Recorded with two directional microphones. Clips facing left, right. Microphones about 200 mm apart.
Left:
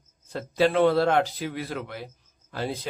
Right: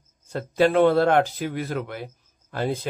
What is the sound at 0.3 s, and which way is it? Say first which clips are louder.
A man's voice: right 3 dB; 50° right (ahead or behind).